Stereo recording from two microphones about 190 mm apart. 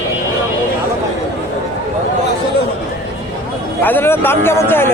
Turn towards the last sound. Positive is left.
turn(degrees=10)  # may be behind; listen again after turning